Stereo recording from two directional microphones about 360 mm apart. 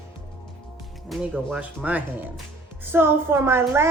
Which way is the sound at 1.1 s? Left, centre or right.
Centre.